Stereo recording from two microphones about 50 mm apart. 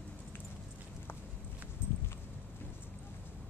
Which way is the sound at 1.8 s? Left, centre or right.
Left.